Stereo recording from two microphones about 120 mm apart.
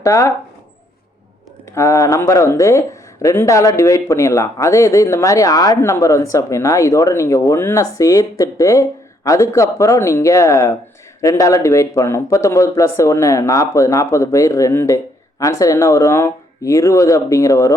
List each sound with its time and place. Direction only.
0.0 s speech: 25° left (ahead or behind)
1.7 s speech: 25° left (ahead or behind)